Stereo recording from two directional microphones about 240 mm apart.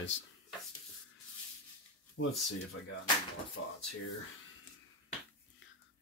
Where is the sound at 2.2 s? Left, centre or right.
Left.